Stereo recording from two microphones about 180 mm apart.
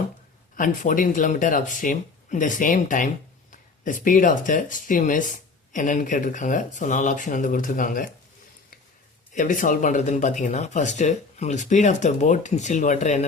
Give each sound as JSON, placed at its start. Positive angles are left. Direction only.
{"t": 0.5, "sound": "speech", "side_deg": 45}
{"t": 9.3, "sound": "speech", "side_deg": 45}